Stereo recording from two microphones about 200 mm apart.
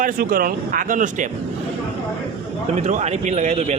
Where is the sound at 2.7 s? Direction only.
35° right (ahead or behind).